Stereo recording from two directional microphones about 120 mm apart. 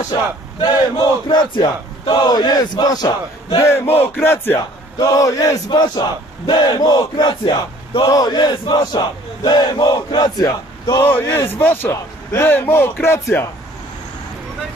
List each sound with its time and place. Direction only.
0.6 s battle cry: 40° left (ahead or behind)
3.6 s a man's voice: 20° left (ahead or behind)
4.9 s a man's voice: 30° left (ahead or behind)
5.7 s battle cry: 40° left (ahead or behind)
11.0 s a man's voice: 15° left (ahead or behind)